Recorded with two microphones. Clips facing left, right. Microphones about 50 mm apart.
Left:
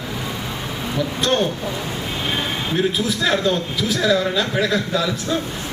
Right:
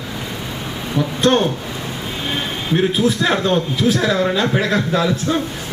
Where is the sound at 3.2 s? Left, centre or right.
Right.